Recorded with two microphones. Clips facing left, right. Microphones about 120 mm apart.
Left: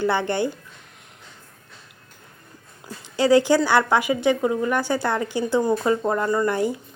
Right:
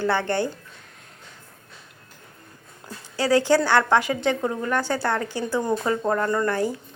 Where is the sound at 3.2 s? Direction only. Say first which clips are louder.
Left 3 dB; 15° left (ahead or behind).